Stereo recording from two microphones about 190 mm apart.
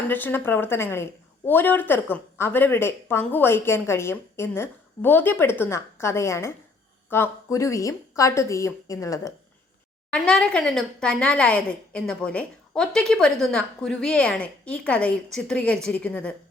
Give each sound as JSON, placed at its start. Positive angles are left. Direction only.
{"t": 0.1, "sound": "speech", "side_deg": 10}
{"t": 10.1, "sound": "speech", "side_deg": 5}